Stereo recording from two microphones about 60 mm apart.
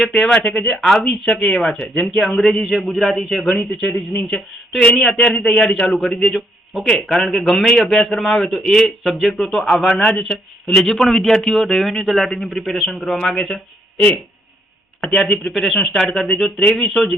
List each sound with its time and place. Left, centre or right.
0.0 s a man's voice: centre
3.6 s a man's voice: left
15.1 s speech: centre
15.5 s speech: centre